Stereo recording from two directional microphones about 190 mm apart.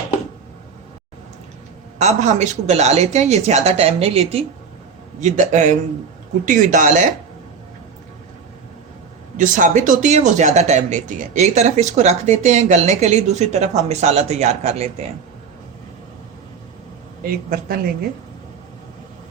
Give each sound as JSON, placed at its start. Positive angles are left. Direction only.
{"t": 2.0, "sound": "a woman's voice", "side_deg": -35}
{"t": 9.4, "sound": "speech", "side_deg": -40}
{"t": 17.2, "sound": "a woman's voice", "side_deg": -50}